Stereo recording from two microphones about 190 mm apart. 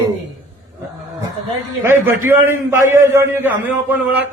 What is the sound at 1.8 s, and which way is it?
A man's voice, 10° right (ahead or behind).